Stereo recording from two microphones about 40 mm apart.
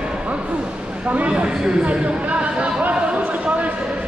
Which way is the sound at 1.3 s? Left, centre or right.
Right.